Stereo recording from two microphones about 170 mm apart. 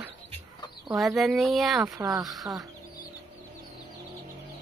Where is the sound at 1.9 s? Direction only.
20° right (ahead or behind).